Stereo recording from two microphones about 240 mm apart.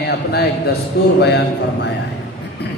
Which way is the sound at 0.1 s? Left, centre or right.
Left.